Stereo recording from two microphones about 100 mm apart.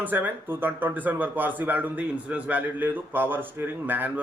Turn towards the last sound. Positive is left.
turn(degrees=-20)  # may be behind; listen again after turning